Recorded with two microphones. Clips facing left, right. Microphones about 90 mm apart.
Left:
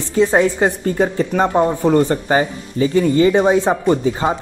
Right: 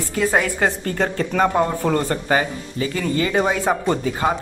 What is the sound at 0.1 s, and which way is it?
Speech, 25° left (ahead or behind).